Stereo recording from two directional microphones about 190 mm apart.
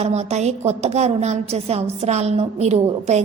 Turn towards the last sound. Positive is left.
turn(degrees=-35)  # may be behind; listen again after turning